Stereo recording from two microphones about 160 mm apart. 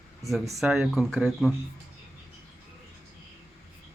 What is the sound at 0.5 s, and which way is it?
Speech, 5° right (ahead or behind).